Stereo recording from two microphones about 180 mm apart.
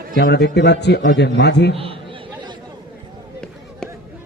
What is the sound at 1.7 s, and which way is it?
Speech, 30° right (ahead or behind).